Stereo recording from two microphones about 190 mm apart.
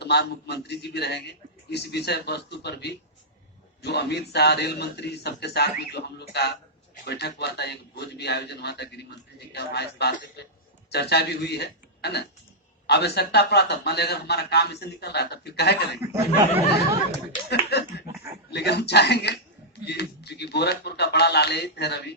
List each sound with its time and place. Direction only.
0.0 s speech: 60° left (ahead or behind)
17.5 s a sound: 60° left (ahead or behind)
18.5 s speech: 60° left (ahead or behind)